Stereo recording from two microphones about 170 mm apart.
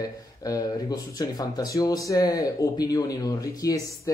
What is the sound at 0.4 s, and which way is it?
Speech, 20° left (ahead or behind).